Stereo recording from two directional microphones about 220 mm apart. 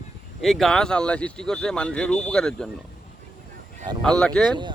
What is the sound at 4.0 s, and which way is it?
Speech, 5° left (ahead or behind).